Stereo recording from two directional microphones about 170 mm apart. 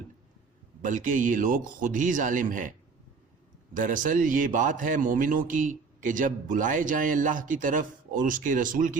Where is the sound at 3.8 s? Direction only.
50° right (ahead or behind).